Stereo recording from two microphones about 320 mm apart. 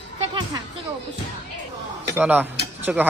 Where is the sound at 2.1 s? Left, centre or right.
Centre.